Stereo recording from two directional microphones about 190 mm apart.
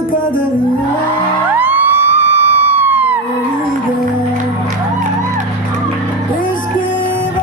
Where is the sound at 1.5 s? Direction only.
10° right (ahead or behind).